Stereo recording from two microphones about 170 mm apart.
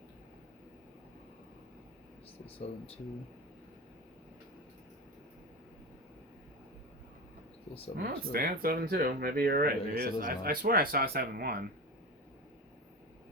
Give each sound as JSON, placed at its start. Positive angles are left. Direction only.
{"t": 7.9, "sound": "speech", "side_deg": -60}